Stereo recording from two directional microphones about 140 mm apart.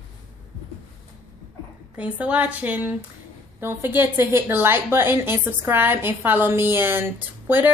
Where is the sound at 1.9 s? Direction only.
10° right (ahead or behind).